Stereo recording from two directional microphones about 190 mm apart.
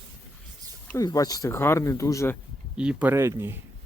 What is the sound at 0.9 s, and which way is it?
Speech, 15° left (ahead or behind).